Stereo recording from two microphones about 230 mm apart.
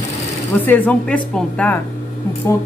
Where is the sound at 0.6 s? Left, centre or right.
Centre.